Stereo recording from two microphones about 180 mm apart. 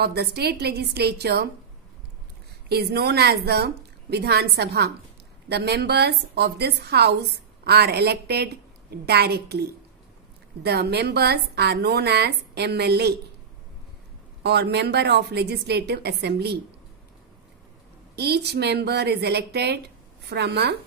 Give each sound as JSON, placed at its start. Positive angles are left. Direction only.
{"t": 0.0, "sound": "a woman's voice", "side_deg": -60}
{"t": 2.7, "sound": "a woman's voice", "side_deg": -65}
{"t": 14.4, "sound": "a woman's voice", "side_deg": -65}
{"t": 18.1, "sound": "a woman's voice", "side_deg": -65}